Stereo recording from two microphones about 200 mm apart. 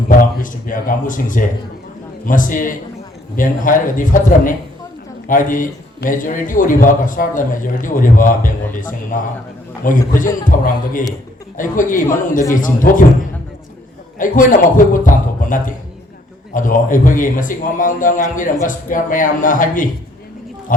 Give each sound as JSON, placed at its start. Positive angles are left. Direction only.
{"t": 0.1, "sound": "a man's voice", "side_deg": 40}
{"t": 14.2, "sound": "a man's voice", "side_deg": 40}